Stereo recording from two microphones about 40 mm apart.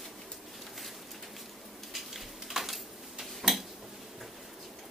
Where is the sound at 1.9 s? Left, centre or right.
Centre.